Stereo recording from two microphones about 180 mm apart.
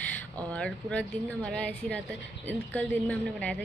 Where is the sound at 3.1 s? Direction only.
5° left (ahead or behind).